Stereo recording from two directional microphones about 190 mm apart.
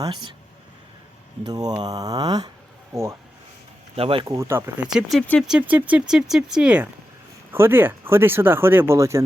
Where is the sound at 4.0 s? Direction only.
30° right (ahead or behind).